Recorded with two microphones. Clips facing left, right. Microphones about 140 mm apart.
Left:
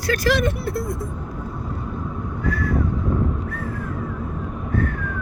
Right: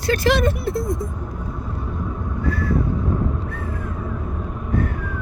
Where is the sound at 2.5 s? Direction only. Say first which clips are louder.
Even; 30° right (ahead or behind).